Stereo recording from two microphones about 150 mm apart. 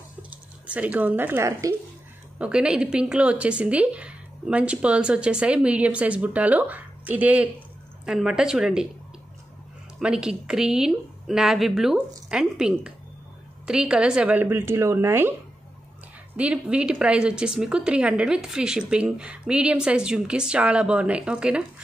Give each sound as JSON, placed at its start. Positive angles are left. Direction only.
{"t": 0.7, "sound": "a woman's voice", "side_deg": -10}
{"t": 2.3, "sound": "a woman's voice", "side_deg": -5}
{"t": 9.9, "sound": "a woman's voice", "side_deg": -5}
{"t": 16.3, "sound": "a woman's voice", "side_deg": -10}